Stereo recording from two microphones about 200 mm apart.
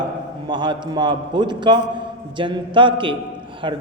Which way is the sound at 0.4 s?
20° right (ahead or behind).